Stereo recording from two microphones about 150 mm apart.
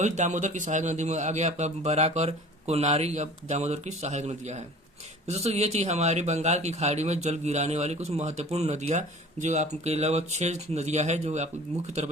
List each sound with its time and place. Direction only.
0.0 s speech: 50° right (ahead or behind)